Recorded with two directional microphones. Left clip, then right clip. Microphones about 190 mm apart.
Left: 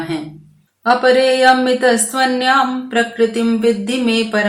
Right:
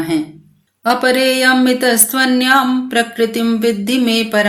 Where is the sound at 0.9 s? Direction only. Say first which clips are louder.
Left 1 dB; 45° right (ahead or behind).